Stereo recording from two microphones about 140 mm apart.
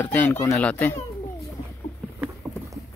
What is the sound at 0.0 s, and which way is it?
Speech, 10° left (ahead or behind).